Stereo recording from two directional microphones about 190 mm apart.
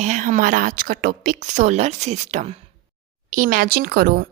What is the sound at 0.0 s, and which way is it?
A woman's voice, 40° right (ahead or behind).